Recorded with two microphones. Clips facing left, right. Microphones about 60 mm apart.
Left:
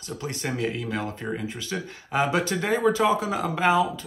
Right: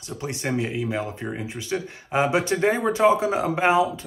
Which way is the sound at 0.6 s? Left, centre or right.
Centre.